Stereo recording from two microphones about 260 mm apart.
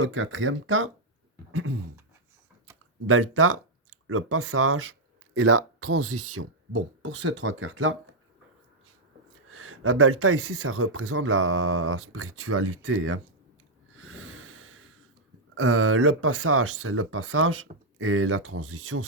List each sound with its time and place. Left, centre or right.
0.0 s speech: right
3.1 s speech: right
9.5 s speech: right
14.0 s snort: right
15.5 s speech: right